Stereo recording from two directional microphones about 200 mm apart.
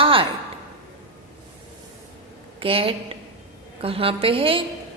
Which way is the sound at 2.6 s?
25° right (ahead or behind).